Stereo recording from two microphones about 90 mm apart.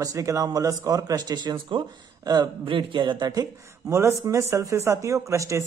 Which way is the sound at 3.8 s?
30° right (ahead or behind).